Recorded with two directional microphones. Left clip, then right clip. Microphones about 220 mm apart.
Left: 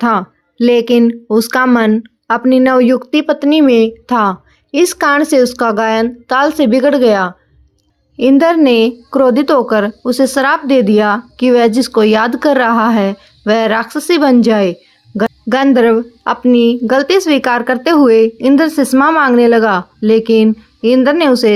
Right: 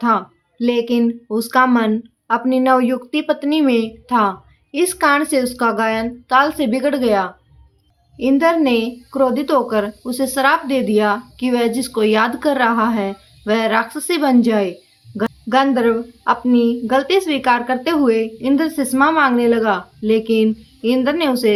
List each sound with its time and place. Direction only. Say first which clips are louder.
0.0 s speech: left 4 dB; 40° left (ahead or behind)